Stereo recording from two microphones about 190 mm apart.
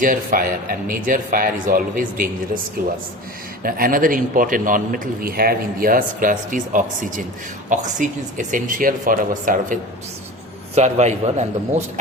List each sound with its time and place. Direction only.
0.0 s a man's voice: 45° right (ahead or behind)
10.8 s a man's voice: 35° right (ahead or behind)